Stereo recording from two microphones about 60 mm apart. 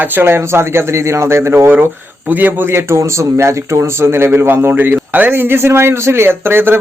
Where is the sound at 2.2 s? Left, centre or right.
Right.